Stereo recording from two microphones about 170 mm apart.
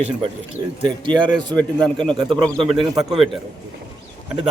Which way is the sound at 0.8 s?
25° right (ahead or behind).